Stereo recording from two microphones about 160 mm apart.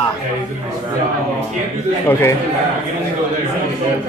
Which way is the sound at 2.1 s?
15° left (ahead or behind).